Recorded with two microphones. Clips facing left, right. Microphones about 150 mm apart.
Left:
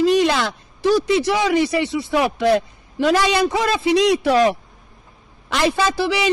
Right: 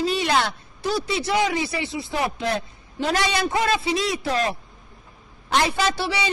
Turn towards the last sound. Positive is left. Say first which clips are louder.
# left 4 dB
turn(degrees=90)